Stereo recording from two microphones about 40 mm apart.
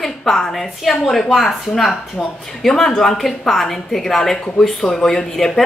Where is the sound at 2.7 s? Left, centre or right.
Centre.